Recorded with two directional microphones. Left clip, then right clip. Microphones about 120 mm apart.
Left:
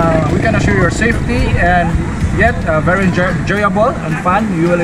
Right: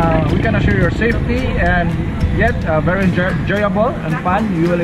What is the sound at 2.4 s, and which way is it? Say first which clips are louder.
Speech: left 3 dB; 25° left (ahead or behind).